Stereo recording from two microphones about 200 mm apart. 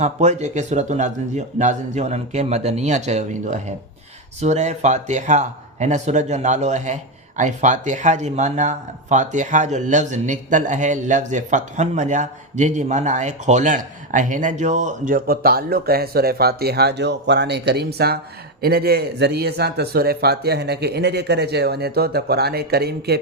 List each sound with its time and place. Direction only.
0.0 s speech: 35° right (ahead or behind); by 23.2 s 55° right (ahead or behind)